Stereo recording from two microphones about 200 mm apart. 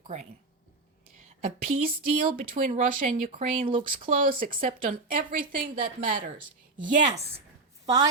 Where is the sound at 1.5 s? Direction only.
45° right (ahead or behind).